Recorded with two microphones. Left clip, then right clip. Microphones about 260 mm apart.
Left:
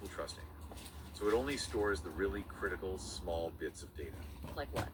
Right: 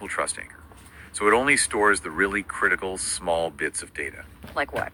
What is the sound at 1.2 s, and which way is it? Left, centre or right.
Speech, right.